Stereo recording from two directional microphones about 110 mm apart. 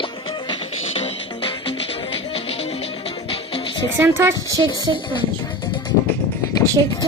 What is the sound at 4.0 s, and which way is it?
Speech, 20° right (ahead or behind).